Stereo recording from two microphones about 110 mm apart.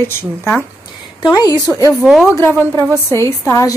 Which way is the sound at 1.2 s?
40° left (ahead or behind).